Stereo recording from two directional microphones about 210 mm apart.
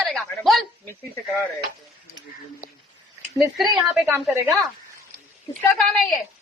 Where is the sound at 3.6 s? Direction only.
Centre (ahead or behind).